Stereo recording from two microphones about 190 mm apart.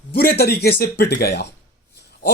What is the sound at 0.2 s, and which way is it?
Speech, 55° left (ahead or behind).